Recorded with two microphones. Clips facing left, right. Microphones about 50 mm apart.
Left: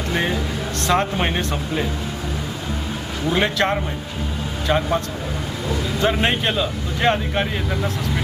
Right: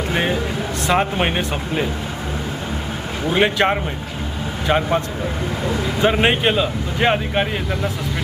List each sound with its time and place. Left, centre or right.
0.1 s speech: right
3.2 s speech: right
7.7 s speech: centre